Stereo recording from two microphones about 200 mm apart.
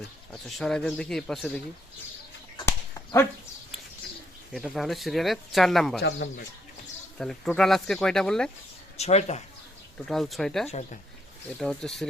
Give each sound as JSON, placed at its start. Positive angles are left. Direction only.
{"t": 0.4, "sound": "speech", "side_deg": 0}
{"t": 2.6, "sound": "dog", "side_deg": 15}
{"t": 4.5, "sound": "speech", "side_deg": 0}
{"t": 6.0, "sound": "speech", "side_deg": 55}
{"t": 7.2, "sound": "speech", "side_deg": 5}
{"t": 9.0, "sound": "speech", "side_deg": 35}
{"t": 10.1, "sound": "speech", "side_deg": 0}